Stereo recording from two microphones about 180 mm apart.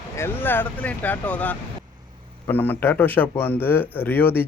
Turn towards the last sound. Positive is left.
turn(degrees=10)  # may be behind; listen again after turning